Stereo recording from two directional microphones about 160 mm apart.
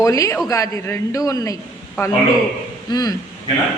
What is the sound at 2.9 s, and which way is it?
Speech, 25° left (ahead or behind).